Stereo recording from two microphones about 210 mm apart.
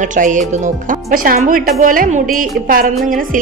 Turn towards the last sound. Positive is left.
turn(degrees=-40)  # may be behind; listen again after turning